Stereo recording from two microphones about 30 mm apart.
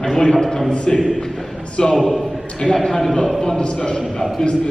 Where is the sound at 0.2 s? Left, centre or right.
Left.